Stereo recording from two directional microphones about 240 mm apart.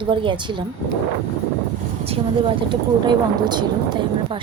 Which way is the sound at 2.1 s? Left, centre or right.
Right.